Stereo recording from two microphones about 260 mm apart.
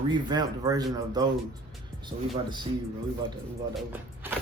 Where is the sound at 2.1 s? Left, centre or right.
Right.